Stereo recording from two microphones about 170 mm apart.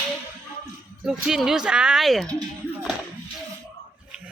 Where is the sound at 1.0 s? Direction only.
5° right (ahead or behind).